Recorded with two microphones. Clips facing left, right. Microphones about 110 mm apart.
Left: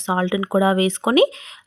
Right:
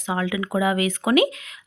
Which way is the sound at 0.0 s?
30° left (ahead or behind).